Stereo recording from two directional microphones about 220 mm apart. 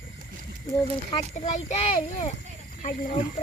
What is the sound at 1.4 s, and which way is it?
Speech, 30° left (ahead or behind).